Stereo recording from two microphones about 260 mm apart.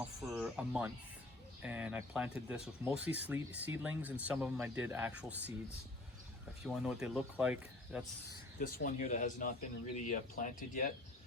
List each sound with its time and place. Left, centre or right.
0.2 s speech: centre
6.6 s speech: centre
8.5 s speech: left